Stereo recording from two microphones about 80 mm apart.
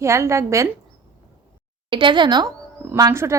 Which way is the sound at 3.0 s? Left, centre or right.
Right.